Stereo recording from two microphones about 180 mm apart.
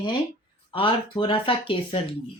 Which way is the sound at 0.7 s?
30° left (ahead or behind).